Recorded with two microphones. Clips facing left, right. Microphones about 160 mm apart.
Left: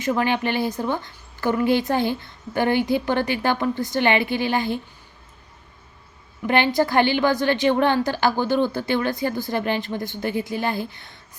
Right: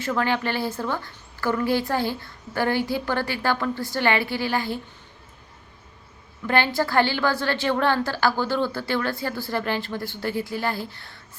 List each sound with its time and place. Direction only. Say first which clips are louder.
0.0 s a woman's voice: left 2 dB; 20° left (ahead or behind)
6.5 s a woman's voice: left 3 dB; 20° left (ahead or behind)